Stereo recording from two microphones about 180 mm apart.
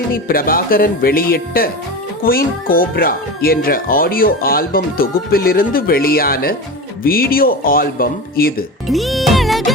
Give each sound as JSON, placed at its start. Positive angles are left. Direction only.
{"t": 0.1, "sound": "speech", "side_deg": 55}
{"t": 8.9, "sound": "music", "side_deg": 0}